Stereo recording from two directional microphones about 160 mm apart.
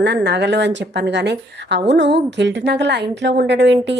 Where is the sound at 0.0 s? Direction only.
90° right.